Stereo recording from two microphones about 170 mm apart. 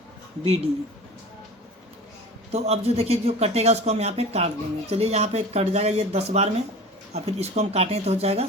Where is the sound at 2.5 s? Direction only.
40° right (ahead or behind).